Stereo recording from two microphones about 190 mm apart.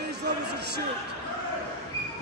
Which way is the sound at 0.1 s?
60° right (ahead or behind).